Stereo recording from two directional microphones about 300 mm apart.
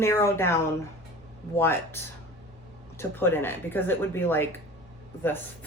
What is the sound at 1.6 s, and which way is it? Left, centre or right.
Speech, centre.